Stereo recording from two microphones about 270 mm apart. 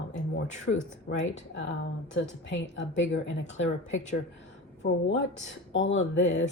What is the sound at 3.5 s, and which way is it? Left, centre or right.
Speech, left.